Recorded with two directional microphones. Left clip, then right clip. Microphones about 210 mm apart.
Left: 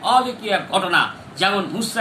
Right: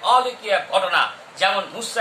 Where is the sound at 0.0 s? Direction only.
10° right (ahead or behind).